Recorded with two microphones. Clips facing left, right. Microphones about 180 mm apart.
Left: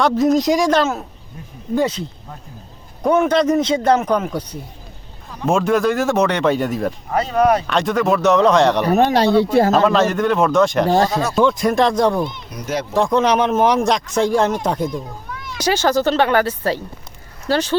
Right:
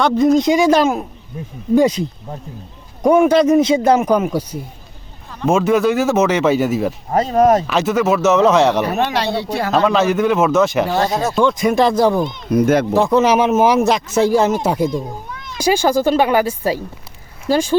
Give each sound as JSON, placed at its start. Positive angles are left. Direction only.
{"t": 0.0, "sound": "speech", "side_deg": 0}
{"t": 7.1, "sound": "speech", "side_deg": -45}
{"t": 7.7, "sound": "speech", "side_deg": -5}
{"t": 8.8, "sound": "speech", "side_deg": 40}
{"t": 9.7, "sound": "speech", "side_deg": 0}
{"t": 10.8, "sound": "speech", "side_deg": 35}
{"t": 11.1, "sound": "speech", "side_deg": -25}
{"t": 11.3, "sound": "speech", "side_deg": 0}
{"t": 12.5, "sound": "speech", "side_deg": -55}
{"t": 12.9, "sound": "speech", "side_deg": -5}
{"t": 14.9, "sound": "children playing", "side_deg": -20}
{"t": 15.5, "sound": "speech", "side_deg": -10}